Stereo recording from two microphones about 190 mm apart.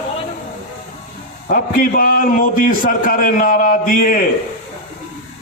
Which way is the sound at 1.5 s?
50° left (ahead or behind).